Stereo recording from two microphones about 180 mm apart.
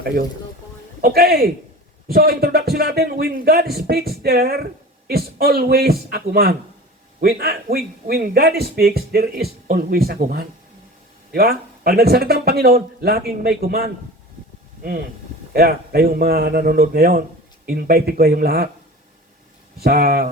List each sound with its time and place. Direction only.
1.0 s speech: 60° right (ahead or behind)
15.5 s speech: 60° right (ahead or behind)
19.8 s speech: 60° right (ahead or behind)